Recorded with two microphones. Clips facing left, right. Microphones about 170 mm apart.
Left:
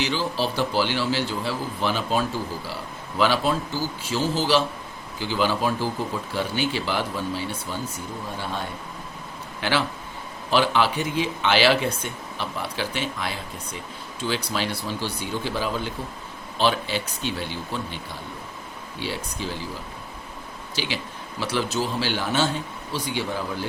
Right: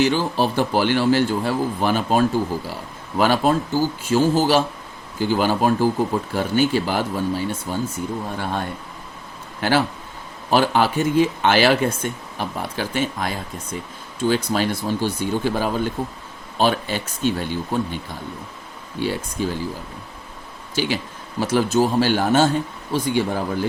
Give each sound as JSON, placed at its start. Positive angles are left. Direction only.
{"t": 0.0, "sound": "speech", "side_deg": -50}
{"t": 9.6, "sound": "speech", "side_deg": -45}
{"t": 20.7, "sound": "speech", "side_deg": -45}